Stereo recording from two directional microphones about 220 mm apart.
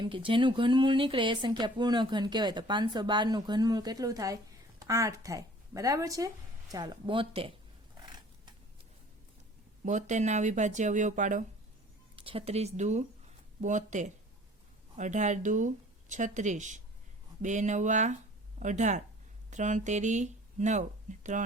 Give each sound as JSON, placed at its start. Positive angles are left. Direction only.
{"t": 0.0, "sound": "speech", "side_deg": -25}
{"t": 8.0, "sound": "a sound", "side_deg": -20}
{"t": 9.8, "sound": "speech", "side_deg": -35}